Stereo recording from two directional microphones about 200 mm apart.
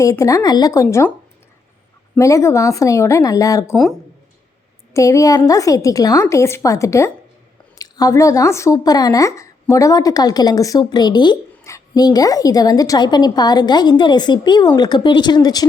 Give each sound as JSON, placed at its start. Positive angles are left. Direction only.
{"t": 0.0, "sound": "a woman's voice", "side_deg": 15}
{"t": 2.1, "sound": "a woman's voice", "side_deg": 15}
{"t": 4.9, "sound": "a woman's voice", "side_deg": 15}